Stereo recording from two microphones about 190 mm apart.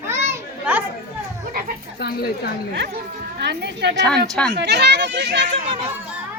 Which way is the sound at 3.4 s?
60° right (ahead or behind).